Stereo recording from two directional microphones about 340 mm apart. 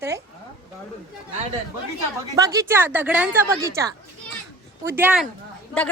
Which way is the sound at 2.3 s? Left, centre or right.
Centre.